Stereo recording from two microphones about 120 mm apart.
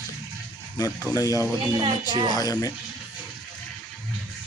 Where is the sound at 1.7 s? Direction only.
40° right (ahead or behind).